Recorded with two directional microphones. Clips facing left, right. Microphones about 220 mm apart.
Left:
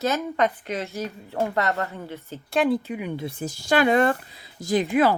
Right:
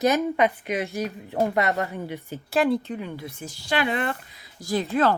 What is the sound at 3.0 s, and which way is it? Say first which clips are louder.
Speech: left 3 dB; 15° left (ahead or behind).